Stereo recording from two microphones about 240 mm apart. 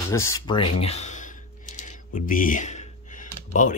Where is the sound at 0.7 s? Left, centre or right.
Left.